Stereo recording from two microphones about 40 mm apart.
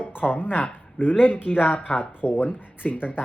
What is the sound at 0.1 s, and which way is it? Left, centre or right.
Speech, left.